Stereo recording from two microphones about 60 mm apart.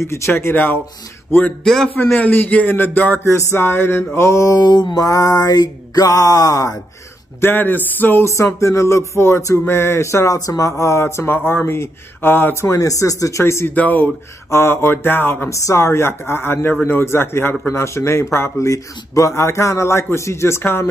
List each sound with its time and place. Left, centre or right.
0.0 s a man's voice: left
1.6 s a man's voice: centre
2.1 s speech: left
3.5 s speech: left
4.3 s mantra: left
7.3 s speech: left
8.2 s a man's voice: left
12.5 s speech: left
13.4 s a man's voice: left
13.7 s speech: left
14.5 s speech: left
15.5 s a man's voice: left